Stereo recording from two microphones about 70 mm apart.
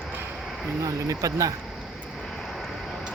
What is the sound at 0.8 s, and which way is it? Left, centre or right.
Speech, right.